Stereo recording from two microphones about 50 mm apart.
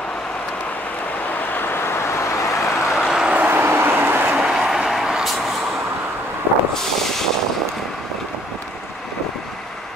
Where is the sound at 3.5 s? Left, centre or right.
Right.